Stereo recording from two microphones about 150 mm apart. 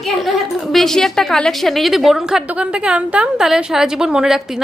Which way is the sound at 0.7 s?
Centre (ahead or behind).